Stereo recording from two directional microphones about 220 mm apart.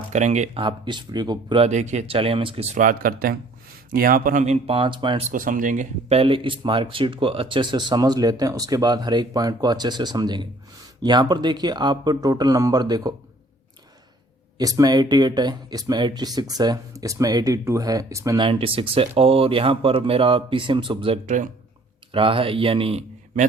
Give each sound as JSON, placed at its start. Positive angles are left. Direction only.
{"t": 0.1, "sound": "speech", "side_deg": -30}
{"t": 5.3, "sound": "speech", "side_deg": -35}
{"t": 14.6, "sound": "speech", "side_deg": -15}
{"t": 21.2, "sound": "speech", "side_deg": -35}
{"t": 22.1, "sound": "speech", "side_deg": -25}